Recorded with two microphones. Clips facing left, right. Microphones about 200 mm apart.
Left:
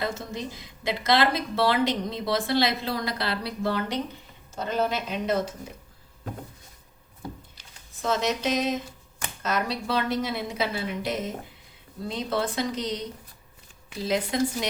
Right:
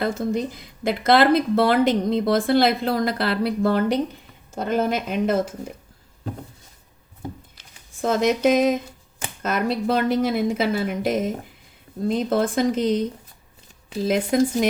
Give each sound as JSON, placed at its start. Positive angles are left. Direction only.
{"t": 0.0, "sound": "speech", "side_deg": -55}
{"t": 8.0, "sound": "speech", "side_deg": -50}